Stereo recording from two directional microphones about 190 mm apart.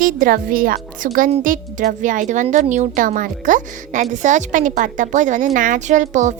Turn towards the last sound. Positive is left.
turn(degrees=-40)  # may be behind; listen again after turning